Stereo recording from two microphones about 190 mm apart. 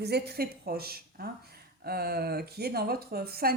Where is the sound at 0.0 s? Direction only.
60° right (ahead or behind).